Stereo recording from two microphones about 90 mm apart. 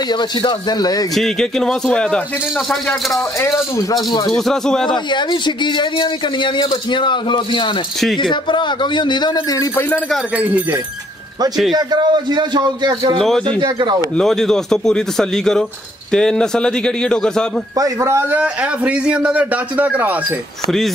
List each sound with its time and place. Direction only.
0.1 s speech: 55° left (ahead or behind)
1.1 s a man's voice: 5° left (ahead or behind)
3.2 s speech: 30° left (ahead or behind)
4.3 s a man's voice: 5° left (ahead or behind)
5.1 s speech: 60° left (ahead or behind)
10.3 s a man's voice: 20° right (ahead or behind)
11.7 s speech: 50° right (ahead or behind)
13.2 s a man's voice: 5° left (ahead or behind)
17.7 s a man's voice: 35° right (ahead or behind)
18.3 s a man's voice: 15° right (ahead or behind)